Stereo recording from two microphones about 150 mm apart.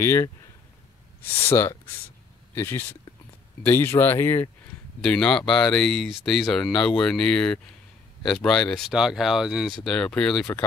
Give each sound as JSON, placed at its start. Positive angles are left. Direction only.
{"t": 0.0, "sound": "speech", "side_deg": 15}
{"t": 1.3, "sound": "speech", "side_deg": 15}